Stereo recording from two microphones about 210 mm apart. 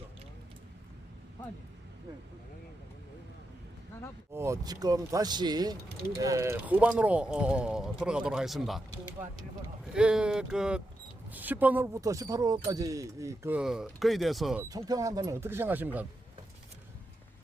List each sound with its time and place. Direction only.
4.4 s speech: 15° right (ahead or behind)
9.8 s speech: 5° right (ahead or behind)
14.6 s speech: 15° right (ahead or behind)